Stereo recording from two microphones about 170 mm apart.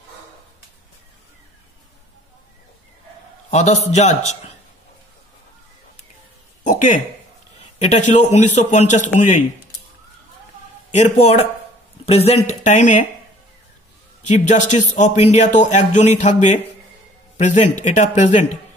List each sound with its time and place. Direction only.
3.4 s speech: 40° left (ahead or behind)
6.6 s a sound: 50° left (ahead or behind)
7.8 s a man's voice: 45° left (ahead or behind)
10.9 s speech: 40° left (ahead or behind)
14.2 s a man's voice: 45° left (ahead or behind)